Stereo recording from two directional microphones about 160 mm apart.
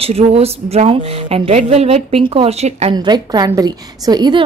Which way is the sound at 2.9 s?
25° right (ahead or behind).